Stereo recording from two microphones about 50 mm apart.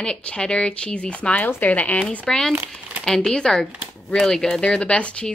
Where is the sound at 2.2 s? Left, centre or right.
Centre.